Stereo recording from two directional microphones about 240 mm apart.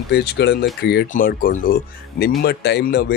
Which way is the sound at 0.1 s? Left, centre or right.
Left.